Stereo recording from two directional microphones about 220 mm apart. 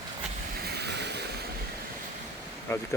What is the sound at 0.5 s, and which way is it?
Vehicle, 45° right (ahead or behind).